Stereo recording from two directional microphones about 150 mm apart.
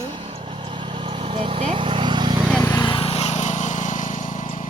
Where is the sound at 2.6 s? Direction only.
25° left (ahead or behind); by 4.7 s 55° left (ahead or behind).